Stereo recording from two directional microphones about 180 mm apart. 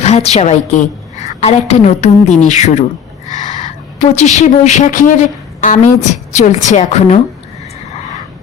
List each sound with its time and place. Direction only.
0.0 s a woman's voice: 35° left (ahead or behind)
4.2 s a woman's voice: 40° left (ahead or behind)